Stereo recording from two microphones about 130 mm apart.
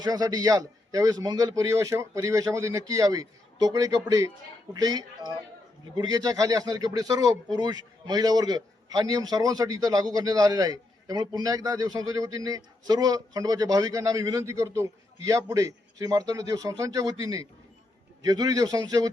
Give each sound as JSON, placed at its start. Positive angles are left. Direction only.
{"t": 0.0, "sound": "a man's voice", "side_deg": -30}